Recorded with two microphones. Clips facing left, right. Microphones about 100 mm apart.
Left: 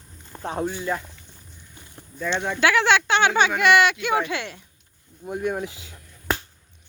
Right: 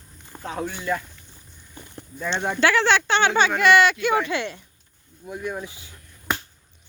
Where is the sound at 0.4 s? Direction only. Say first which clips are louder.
Left 3 dB; 40° left (ahead or behind).